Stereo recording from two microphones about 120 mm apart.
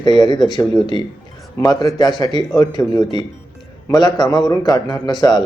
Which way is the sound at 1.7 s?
35° left (ahead or behind).